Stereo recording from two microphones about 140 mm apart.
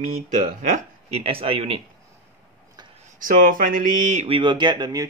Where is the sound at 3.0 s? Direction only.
75° right (ahead or behind).